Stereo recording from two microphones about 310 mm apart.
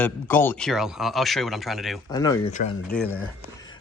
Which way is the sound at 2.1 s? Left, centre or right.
Centre.